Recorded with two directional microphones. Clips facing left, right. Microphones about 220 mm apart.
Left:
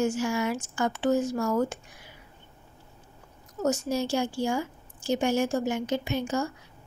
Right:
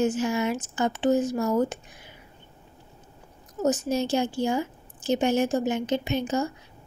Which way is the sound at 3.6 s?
20° right (ahead or behind).